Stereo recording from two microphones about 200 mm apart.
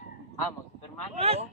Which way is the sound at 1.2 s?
30° right (ahead or behind).